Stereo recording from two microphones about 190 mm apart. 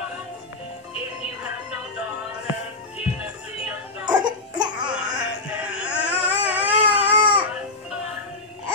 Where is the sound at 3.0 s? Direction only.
5° right (ahead or behind).